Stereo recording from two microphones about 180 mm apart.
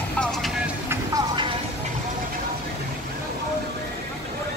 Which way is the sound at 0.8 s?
20° right (ahead or behind).